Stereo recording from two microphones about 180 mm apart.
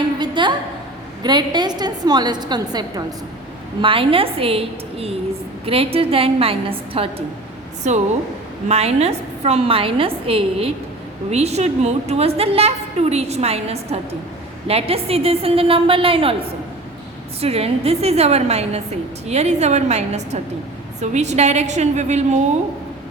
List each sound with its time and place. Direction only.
0.2 s a sound: 25° right (ahead or behind)
1.2 s a woman's voice: 25° right (ahead or behind)
17.4 s a woman's voice: 35° right (ahead or behind)